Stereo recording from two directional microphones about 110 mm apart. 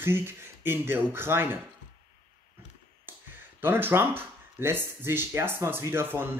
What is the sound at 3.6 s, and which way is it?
Speech, 20° right (ahead or behind).